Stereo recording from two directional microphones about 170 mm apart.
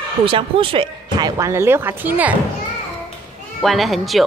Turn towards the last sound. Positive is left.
turn(degrees=0)  # may be behind; listen again after turning